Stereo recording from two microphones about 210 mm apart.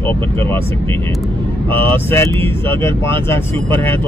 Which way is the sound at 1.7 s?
10° left (ahead or behind).